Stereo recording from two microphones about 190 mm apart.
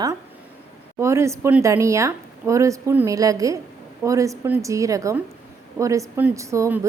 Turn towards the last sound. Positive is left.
turn(degrees=-15)  # may be behind; listen again after turning